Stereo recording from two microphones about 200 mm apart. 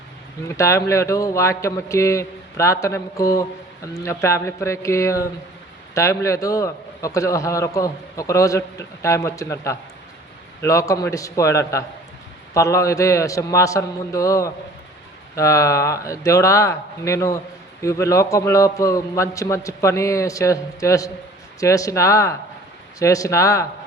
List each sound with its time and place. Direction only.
0.4 s a man's voice: 15° left (ahead or behind)